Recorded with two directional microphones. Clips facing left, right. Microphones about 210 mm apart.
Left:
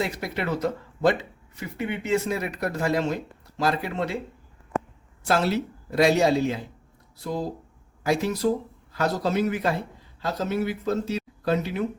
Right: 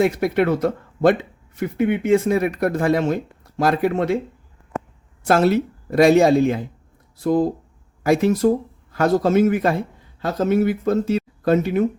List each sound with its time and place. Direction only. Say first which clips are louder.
0.0 s speech: right 10 dB; 55° right (ahead or behind)
5.2 s speech: right 7 dB; 50° right (ahead or behind)